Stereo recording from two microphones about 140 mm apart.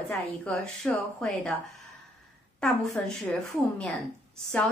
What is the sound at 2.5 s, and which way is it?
Speech, 5° left (ahead or behind).